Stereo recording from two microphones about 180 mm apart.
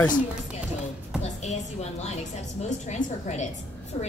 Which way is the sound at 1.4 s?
40° left (ahead or behind).